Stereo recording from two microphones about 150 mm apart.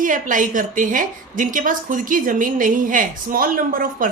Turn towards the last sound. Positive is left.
turn(degrees=-70)  # may be behind; listen again after turning